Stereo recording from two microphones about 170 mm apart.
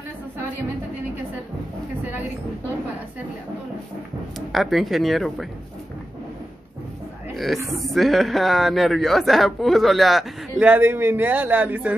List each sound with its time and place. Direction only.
4.5 s speech: centre (ahead or behind)
7.3 s speech: centre (ahead or behind)